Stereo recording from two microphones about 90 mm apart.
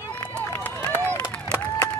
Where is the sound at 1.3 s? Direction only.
10° left (ahead or behind).